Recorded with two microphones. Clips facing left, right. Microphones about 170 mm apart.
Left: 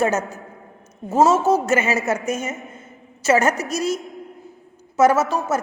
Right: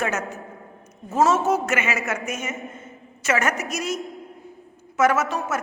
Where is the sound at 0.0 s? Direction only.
35° left (ahead or behind).